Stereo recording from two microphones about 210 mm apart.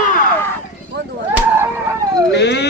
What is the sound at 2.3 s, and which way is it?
Dog, 55° left (ahead or behind).